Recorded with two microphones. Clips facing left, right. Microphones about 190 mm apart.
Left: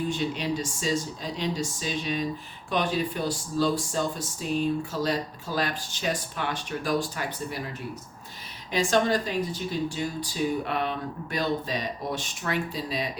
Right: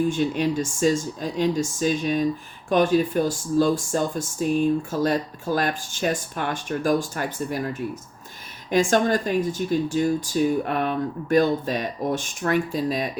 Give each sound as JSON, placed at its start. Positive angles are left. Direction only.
{"t": 0.1, "sound": "speech", "side_deg": -50}